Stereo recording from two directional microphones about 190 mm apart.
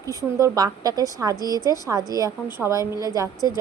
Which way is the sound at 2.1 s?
15° right (ahead or behind).